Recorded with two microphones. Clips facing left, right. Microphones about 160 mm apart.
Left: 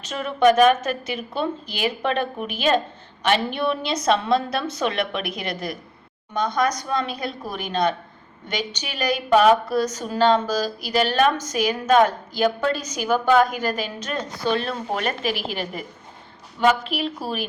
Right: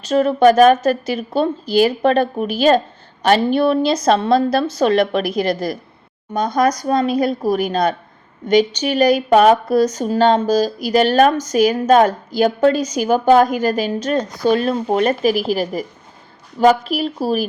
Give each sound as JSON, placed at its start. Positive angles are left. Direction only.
{"t": 0.0, "sound": "a woman's voice", "side_deg": -35}